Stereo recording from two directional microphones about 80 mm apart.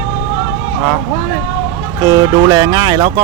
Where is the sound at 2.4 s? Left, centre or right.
Right.